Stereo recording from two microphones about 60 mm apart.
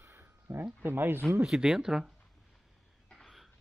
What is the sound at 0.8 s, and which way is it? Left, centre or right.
Speech, right.